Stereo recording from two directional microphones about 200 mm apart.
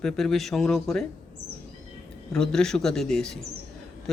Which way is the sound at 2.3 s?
5° left (ahead or behind).